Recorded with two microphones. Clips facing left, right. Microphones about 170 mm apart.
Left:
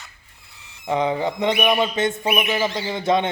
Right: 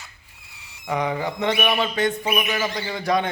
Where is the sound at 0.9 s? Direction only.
25° left (ahead or behind).